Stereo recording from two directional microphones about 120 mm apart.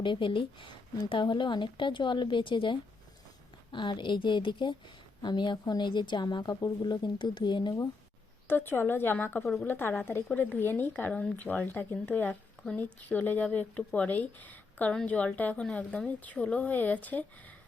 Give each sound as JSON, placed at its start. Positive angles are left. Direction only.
{"t": 0.0, "sound": "speech", "side_deg": 45}
{"t": 8.4, "sound": "a woman's voice", "side_deg": 15}